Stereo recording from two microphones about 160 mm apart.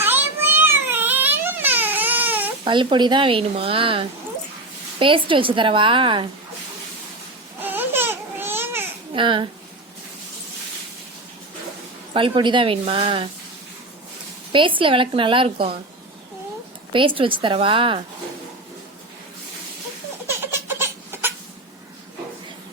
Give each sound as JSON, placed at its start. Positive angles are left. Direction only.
{"t": 0.0, "sound": "a sound", "side_deg": -10}
{"t": 2.6, "sound": "a woman's voice", "side_deg": -30}
{"t": 7.6, "sound": "baby cry", "side_deg": -10}
{"t": 9.1, "sound": "a woman's voice", "side_deg": -30}
{"t": 12.1, "sound": "a woman's voice", "side_deg": -30}
{"t": 14.5, "sound": "a woman's voice", "side_deg": -30}
{"t": 16.9, "sound": "a woman's voice", "side_deg": -30}
{"t": 20.2, "sound": "laughter", "side_deg": -15}